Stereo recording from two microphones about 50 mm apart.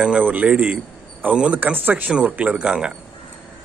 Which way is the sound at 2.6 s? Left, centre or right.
Centre.